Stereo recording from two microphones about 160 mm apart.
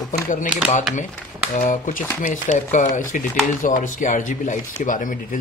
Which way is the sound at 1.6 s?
50° left (ahead or behind).